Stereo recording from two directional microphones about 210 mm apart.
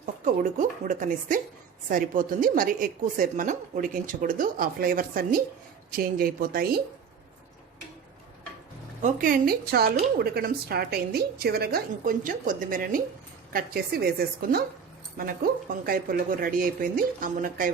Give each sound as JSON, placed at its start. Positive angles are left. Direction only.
{"t": 0.0, "sound": "a woman's voice", "side_deg": -35}
{"t": 9.0, "sound": "speech", "side_deg": -40}